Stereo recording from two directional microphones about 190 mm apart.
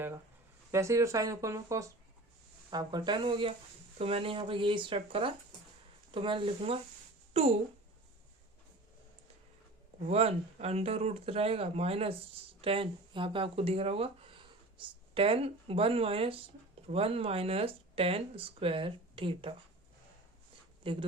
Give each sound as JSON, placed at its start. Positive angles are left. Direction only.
{"t": 0.7, "sound": "speech", "side_deg": -15}
{"t": 10.1, "sound": "speech", "side_deg": -30}
{"t": 20.8, "sound": "speech", "side_deg": -25}